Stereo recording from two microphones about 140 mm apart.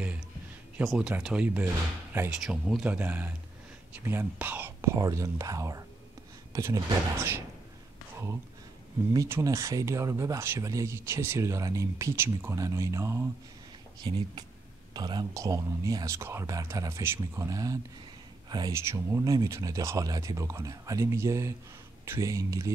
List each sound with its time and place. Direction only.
0.8 s speech: 5° right (ahead or behind)
9.1 s speech: 25° right (ahead or behind)
13.9 s speech: 30° right (ahead or behind)